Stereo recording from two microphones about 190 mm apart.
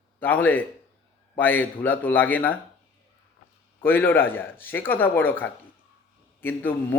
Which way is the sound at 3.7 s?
10° left (ahead or behind).